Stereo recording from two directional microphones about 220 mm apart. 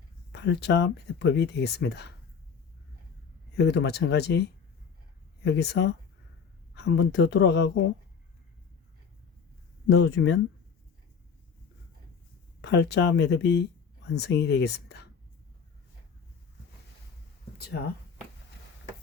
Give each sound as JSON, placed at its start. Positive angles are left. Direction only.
{"t": 0.3, "sound": "speech", "side_deg": 50}
{"t": 3.6, "sound": "speech", "side_deg": 50}
{"t": 9.9, "sound": "speech", "side_deg": 55}
{"t": 12.6, "sound": "speech", "side_deg": 50}
{"t": 17.6, "sound": "speech", "side_deg": 45}